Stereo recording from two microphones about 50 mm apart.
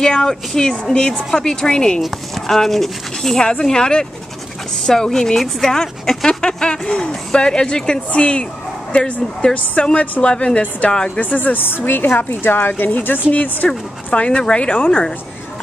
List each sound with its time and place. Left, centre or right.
0.0 s speech: centre
2.0 s a woman's voice: centre; by 13.7 s left
13.7 s speech: left